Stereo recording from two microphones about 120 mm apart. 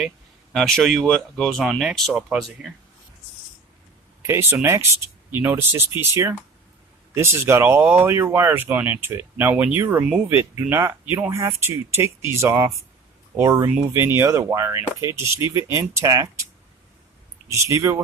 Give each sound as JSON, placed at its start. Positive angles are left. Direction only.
{"t": 0.5, "sound": "speech", "side_deg": 0}
{"t": 4.2, "sound": "speech", "side_deg": -20}
{"t": 17.5, "sound": "speech", "side_deg": -25}